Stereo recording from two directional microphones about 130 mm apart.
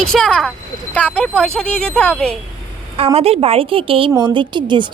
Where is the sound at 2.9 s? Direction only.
50° right (ahead or behind).